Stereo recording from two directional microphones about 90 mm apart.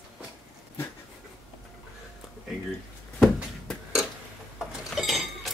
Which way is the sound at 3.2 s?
5° left (ahead or behind).